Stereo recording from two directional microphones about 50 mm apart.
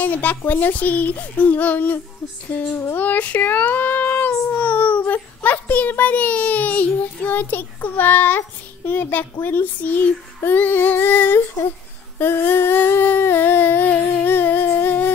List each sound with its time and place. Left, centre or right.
0.0 s a child's voice: left
3.0 s a child's voice: left
4.6 s a child's voice: left
12.2 s humming: left